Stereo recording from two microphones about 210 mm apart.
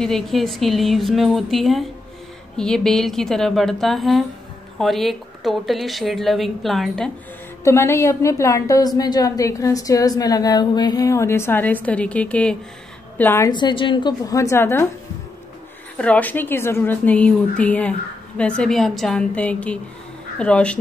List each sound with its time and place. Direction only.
0.0 s speech: centre (ahead or behind)
7.6 s a woman's voice: 15° left (ahead or behind)
16.0 s a woman's voice: 5° left (ahead or behind)